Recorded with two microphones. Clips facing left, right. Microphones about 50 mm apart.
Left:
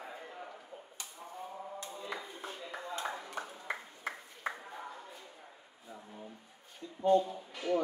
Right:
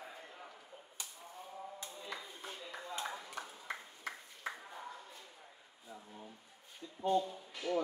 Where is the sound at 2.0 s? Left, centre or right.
Centre.